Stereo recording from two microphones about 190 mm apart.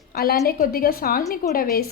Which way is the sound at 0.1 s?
55° left (ahead or behind).